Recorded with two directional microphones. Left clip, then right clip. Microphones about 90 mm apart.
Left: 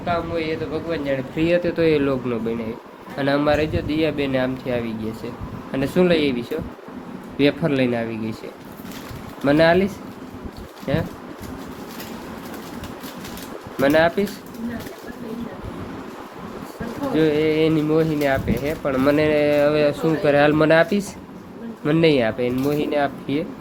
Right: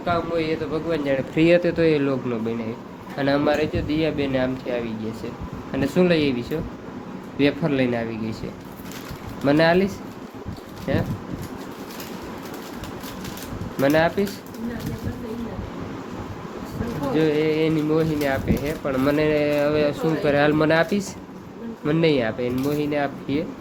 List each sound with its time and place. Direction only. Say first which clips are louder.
0.0 s a man's voice: even; 60° right (ahead or behind); by 1.0 s 80° right
1.7 s speech: left 1 dB; 10° left (ahead or behind)
3.2 s speech: left 1 dB; centre (ahead or behind)
3.4 s speech: left 2 dB; 15° left (ahead or behind)
7.3 s speech: left 2 dB; 20° left (ahead or behind)
9.4 s speech: left 2 dB; 10° left (ahead or behind)
13.8 s speech: left 2 dB; 20° left (ahead or behind)
17.2 s speech: left 2 dB; 20° left (ahead or behind)
17.4 s music: left 3 dB; 30° left (ahead or behind)
17.9 s speech: left 3 dB; 20° left (ahead or behind)
20.2 s speech: left 3 dB; 20° left (ahead or behind)